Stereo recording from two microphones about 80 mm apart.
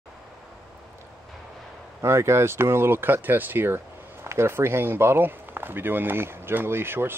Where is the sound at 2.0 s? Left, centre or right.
Right.